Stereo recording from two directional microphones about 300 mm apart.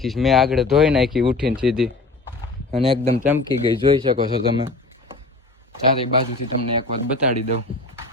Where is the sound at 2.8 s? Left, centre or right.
Centre.